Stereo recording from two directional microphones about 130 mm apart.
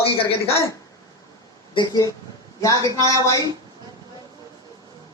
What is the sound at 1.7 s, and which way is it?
Speech, 30° left (ahead or behind).